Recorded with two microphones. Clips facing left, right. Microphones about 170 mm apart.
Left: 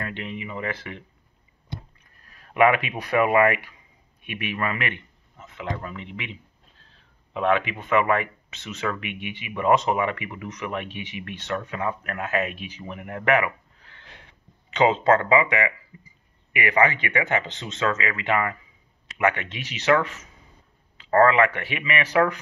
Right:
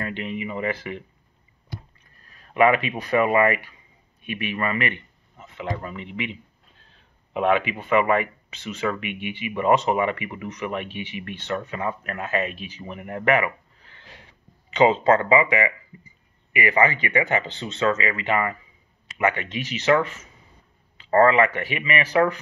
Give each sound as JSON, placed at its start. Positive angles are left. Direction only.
{"t": 0.0, "sound": "speech", "side_deg": -5}
{"t": 2.5, "sound": "speech", "side_deg": 5}
{"t": 7.3, "sound": "speech", "side_deg": -10}
{"t": 19.0, "sound": "a sound", "side_deg": 0}
{"t": 19.4, "sound": "speech", "side_deg": -45}
{"t": 21.1, "sound": "speech", "side_deg": -5}